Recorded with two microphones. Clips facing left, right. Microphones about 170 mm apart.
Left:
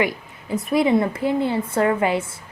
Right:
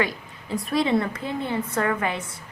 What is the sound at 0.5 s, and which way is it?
A woman's voice, 20° left (ahead or behind).